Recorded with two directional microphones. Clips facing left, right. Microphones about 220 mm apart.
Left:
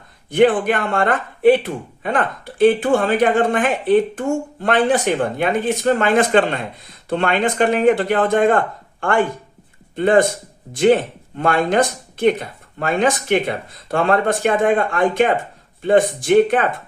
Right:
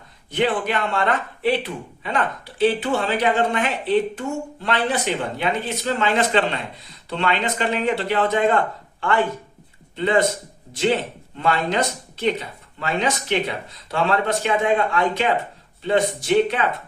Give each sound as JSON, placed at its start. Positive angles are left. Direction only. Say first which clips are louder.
{"t": 0.3, "sound": "speech", "louder": "left 7 dB", "side_deg": 50}
{"t": 11.3, "sound": "speech", "louder": "left 5 dB", "side_deg": 50}